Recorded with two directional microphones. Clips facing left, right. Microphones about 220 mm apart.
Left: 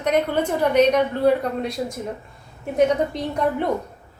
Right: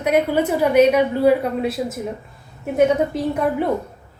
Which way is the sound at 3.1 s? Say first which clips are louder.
Right 5 dB; 5° right (ahead or behind).